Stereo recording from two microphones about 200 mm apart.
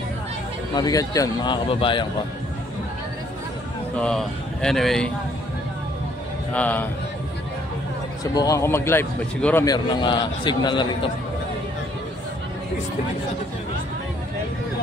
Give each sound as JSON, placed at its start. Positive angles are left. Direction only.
{"t": 0.7, "sound": "speech", "side_deg": 20}
{"t": 4.0, "sound": "speech", "side_deg": 5}
{"t": 6.5, "sound": "a man's voice", "side_deg": 10}
{"t": 8.2, "sound": "a man's voice", "side_deg": 15}
{"t": 9.7, "sound": "speech", "side_deg": 20}